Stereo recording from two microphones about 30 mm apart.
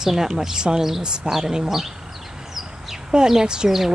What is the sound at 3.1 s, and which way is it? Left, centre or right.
Speech, right.